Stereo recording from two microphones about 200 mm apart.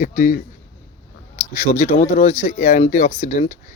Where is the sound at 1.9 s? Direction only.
40° left (ahead or behind).